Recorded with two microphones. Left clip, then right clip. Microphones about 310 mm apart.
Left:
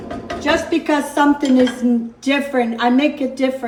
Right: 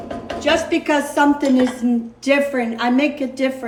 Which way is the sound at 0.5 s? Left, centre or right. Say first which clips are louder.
Left 1 dB; left.